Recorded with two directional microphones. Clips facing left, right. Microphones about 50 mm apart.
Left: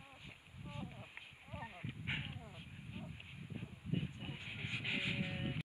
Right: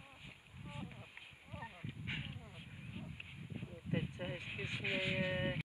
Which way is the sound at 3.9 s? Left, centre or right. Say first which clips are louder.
Right 3 dB; right.